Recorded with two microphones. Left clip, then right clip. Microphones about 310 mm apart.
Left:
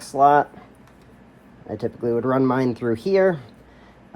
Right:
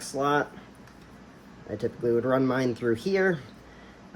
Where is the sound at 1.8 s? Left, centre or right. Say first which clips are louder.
Left 3 dB; centre.